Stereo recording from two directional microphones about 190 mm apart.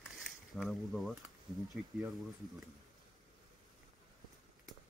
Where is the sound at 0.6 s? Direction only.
Centre (ahead or behind).